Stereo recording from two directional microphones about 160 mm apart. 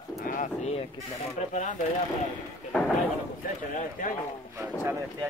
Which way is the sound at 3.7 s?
55° left (ahead or behind).